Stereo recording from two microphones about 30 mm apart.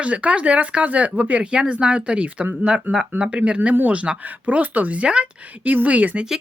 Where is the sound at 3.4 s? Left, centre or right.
Right.